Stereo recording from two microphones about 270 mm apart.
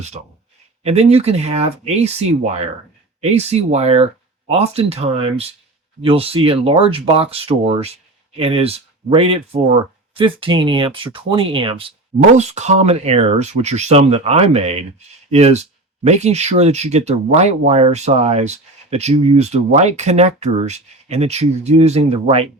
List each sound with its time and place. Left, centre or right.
0.8 s speech: right